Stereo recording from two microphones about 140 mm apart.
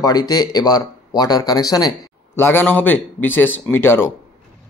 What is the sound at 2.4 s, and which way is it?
A man's voice, 15° left (ahead or behind).